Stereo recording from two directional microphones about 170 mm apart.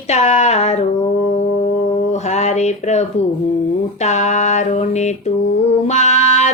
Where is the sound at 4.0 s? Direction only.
40° left (ahead or behind).